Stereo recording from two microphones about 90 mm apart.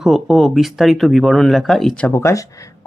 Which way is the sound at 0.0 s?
Centre (ahead or behind).